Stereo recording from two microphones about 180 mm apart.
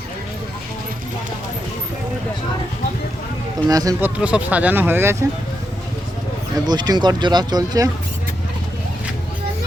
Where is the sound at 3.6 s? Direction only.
20° right (ahead or behind).